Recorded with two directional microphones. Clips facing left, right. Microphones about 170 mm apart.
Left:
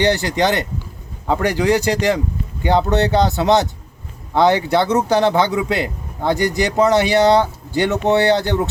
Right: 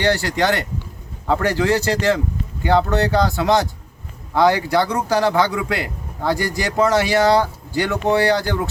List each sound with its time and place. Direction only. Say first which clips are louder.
0.0 s a man's voice: left 2 dB; 20° left (ahead or behind)